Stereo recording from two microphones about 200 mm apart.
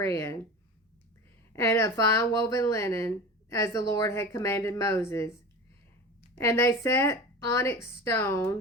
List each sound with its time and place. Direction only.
0.0 s a woman's voice: 15° left (ahead or behind)
1.5 s a woman's voice: 15° left (ahead or behind)
6.3 s a woman's voice: 15° left (ahead or behind)